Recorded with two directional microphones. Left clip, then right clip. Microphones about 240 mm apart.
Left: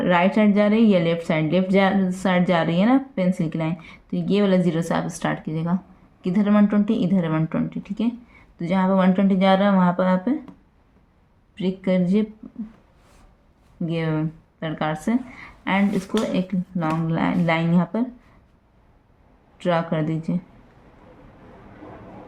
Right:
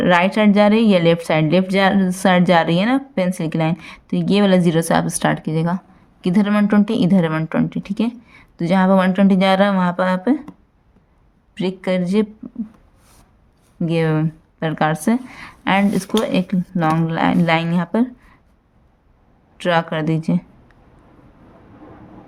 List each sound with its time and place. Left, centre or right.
0.0 s a woman's voice: right
11.5 s a woman's voice: right
13.8 s a woman's voice: right
19.5 s a woman's voice: right